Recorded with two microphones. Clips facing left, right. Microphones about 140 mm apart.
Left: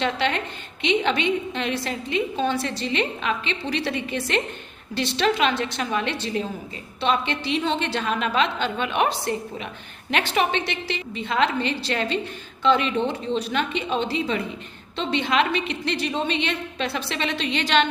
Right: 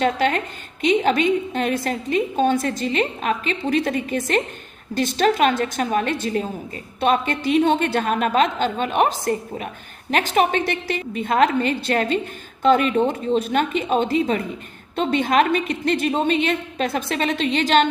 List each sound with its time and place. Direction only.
0.0 s a woman's voice: 45° right (ahead or behind)